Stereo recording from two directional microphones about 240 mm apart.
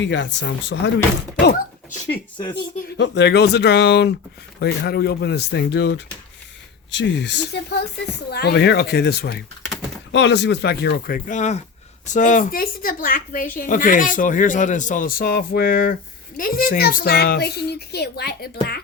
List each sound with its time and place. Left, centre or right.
0.0 s speech: left
2.4 s speech: centre
3.0 s speech: left